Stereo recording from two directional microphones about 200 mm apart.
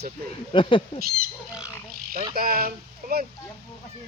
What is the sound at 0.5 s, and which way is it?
Speech, 25° left (ahead or behind).